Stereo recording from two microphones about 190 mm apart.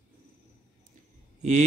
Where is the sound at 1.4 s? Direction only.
40° right (ahead or behind).